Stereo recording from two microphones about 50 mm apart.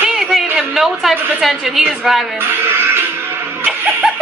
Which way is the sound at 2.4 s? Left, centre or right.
Right.